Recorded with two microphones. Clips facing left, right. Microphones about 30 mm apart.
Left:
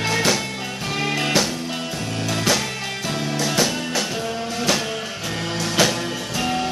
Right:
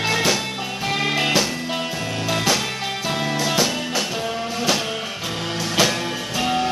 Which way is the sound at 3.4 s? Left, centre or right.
Centre.